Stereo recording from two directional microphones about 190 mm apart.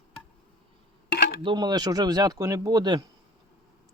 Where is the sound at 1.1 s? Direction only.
60° left (ahead or behind).